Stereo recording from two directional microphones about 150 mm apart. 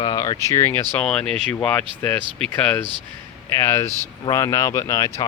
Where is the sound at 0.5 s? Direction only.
15° left (ahead or behind).